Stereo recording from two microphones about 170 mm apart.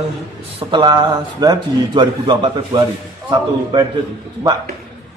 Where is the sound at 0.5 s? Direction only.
25° right (ahead or behind).